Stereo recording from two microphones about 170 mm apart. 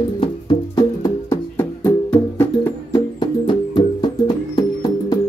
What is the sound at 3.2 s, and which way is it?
Music, 25° left (ahead or behind).